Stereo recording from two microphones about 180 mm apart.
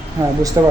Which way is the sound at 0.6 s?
20° right (ahead or behind).